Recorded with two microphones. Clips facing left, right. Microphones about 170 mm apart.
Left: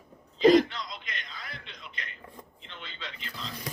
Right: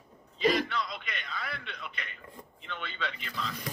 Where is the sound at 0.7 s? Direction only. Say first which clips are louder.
Right 5 dB; 60° right (ahead or behind).